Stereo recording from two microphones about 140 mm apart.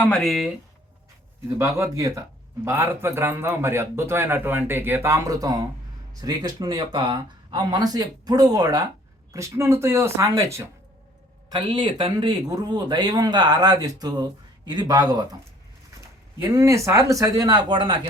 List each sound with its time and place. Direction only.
0.0 s speech: 5° left (ahead or behind)
1.5 s a man's voice: 20° right (ahead or behind)
11.4 s speech: 30° right (ahead or behind)
16.4 s speech: 25° right (ahead or behind)